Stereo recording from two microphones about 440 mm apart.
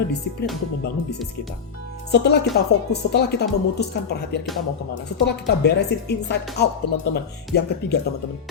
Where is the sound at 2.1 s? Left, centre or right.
Left.